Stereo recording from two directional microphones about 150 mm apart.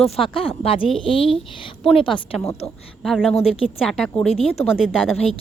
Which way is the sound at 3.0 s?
Centre (ahead or behind).